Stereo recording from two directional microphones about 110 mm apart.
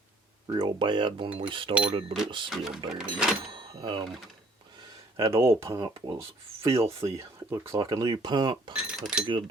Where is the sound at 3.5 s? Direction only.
50° right (ahead or behind).